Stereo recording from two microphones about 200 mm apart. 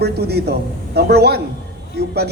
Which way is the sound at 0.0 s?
55° right (ahead or behind).